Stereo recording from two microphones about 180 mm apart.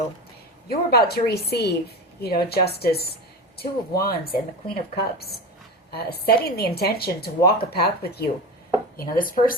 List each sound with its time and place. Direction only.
0.7 s speech: 60° left (ahead or behind)
9.0 s speech: 50° left (ahead or behind)